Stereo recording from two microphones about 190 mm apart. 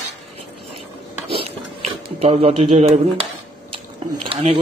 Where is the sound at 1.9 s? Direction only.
35° right (ahead or behind).